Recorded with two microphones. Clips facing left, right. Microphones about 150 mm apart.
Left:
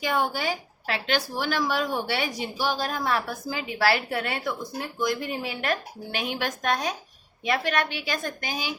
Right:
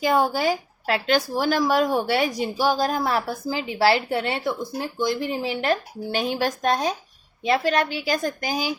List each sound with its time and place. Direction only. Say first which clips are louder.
0.0 s speech: right 6 dB; 40° right (ahead or behind)